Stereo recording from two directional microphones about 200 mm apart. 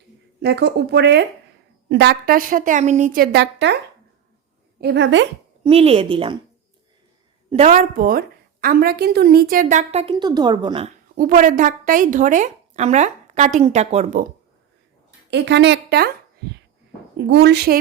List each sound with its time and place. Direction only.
0.4 s a woman's voice: 55° right (ahead or behind)
4.8 s a woman's voice: 55° right (ahead or behind)
5.6 s speech: 30° right (ahead or behind)
7.5 s a woman's voice: 35° right (ahead or behind)
11.1 s a woman's voice: 45° right (ahead or behind)
15.3 s a woman's voice: 60° right (ahead or behind)
17.2 s a woman's voice: 60° right (ahead or behind)